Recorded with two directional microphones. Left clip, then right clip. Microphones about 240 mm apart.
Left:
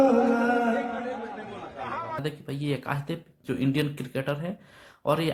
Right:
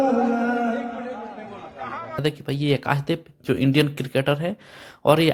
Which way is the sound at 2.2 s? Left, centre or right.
Right.